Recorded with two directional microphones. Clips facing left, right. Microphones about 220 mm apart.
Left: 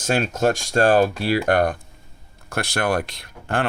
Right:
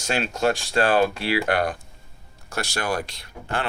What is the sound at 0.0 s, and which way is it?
Speech, 50° left (ahead or behind).